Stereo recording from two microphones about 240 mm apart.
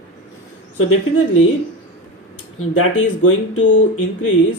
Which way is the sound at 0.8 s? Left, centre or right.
Left.